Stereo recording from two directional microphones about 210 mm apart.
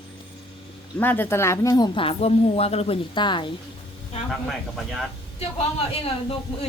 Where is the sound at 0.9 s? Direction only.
10° left (ahead or behind).